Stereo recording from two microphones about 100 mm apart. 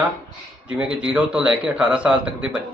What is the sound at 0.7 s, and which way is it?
A man's voice, 10° right (ahead or behind).